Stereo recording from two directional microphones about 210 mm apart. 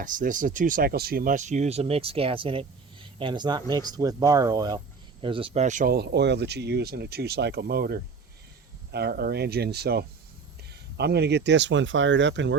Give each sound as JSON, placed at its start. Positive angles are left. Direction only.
{"t": 0.0, "sound": "speech", "side_deg": -40}